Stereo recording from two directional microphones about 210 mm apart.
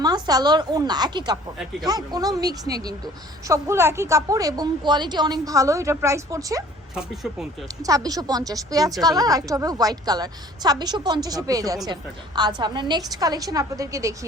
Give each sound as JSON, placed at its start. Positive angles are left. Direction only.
{"t": 0.0, "sound": "a woman's voice", "side_deg": -20}
{"t": 7.9, "sound": "a woman's voice", "side_deg": -15}